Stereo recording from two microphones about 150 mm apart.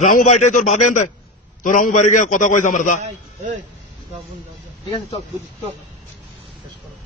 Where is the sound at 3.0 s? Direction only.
55° right (ahead or behind).